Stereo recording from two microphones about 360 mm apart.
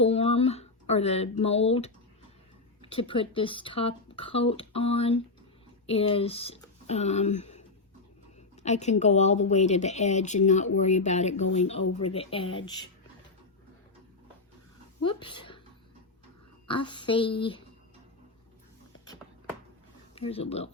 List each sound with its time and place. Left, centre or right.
0.0 s a sound: centre
2.8 s speech: centre
8.6 s speech: centre
15.0 s speech: centre
16.6 s speech: centre
20.1 s speech: centre